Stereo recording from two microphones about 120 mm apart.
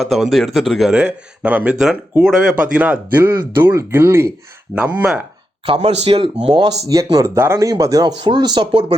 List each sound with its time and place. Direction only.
0.0 s speech: centre (ahead or behind); by 4.3 s 20° right (ahead or behind)
4.7 s speech: 10° right (ahead or behind)
5.6 s speech: 55° right (ahead or behind); by 8.8 s 35° right (ahead or behind)